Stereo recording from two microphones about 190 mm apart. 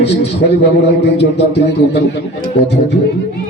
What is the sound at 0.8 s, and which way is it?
A man's voice, 65° left (ahead or behind).